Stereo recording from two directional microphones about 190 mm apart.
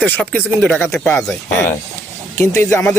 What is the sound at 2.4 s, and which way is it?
Speech, 15° left (ahead or behind).